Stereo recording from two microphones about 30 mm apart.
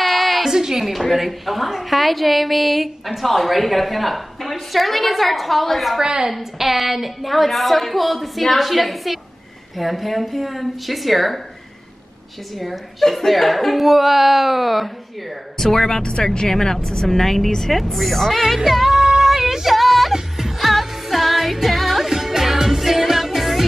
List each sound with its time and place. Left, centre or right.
0.0 s a sound: centre
0.5 s a woman's voice: centre
1.1 s a woman's voice: centre
5.9 s a woman's voice: right
6.3 s a woman's voice: centre
12.5 s a woman's voice: centre
15.6 s a woman's voice: centre
16.0 s speech: left
16.3 s speech: centre
17.2 s a woman's voice: centre
17.7 s a woman's voice: centre
18.7 s music: centre
19.7 s music: centre